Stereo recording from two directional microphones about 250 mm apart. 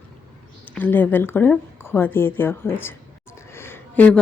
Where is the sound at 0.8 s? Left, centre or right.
Centre.